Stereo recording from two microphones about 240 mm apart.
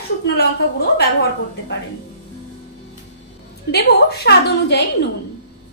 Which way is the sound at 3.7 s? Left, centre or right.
Left.